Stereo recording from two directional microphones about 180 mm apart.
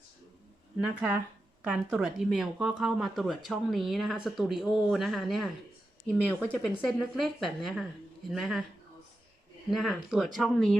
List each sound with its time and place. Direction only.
0.8 s speech: 5° right (ahead or behind)
9.6 s speech: centre (ahead or behind)